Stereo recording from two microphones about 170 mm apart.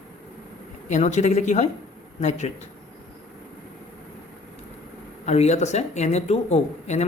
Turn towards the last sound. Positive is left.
turn(degrees=40)  # may be behind; listen again after turning